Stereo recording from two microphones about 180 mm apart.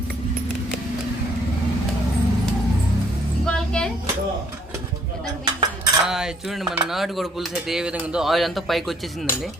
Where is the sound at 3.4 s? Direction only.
5° left (ahead or behind).